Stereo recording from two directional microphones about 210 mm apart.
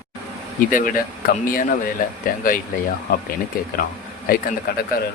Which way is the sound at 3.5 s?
45° left (ahead or behind).